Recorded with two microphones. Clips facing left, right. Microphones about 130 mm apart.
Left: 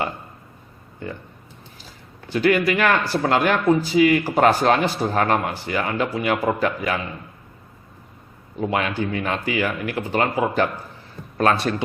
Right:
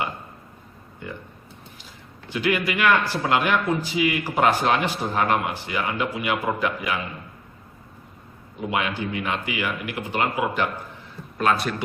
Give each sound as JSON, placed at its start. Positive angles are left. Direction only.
{"t": 2.3, "sound": "a man's voice", "side_deg": 35}
{"t": 8.7, "sound": "a man's voice", "side_deg": 40}